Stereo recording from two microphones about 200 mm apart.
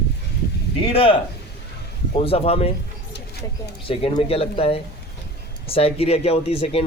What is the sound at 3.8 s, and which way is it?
Speech, 25° left (ahead or behind).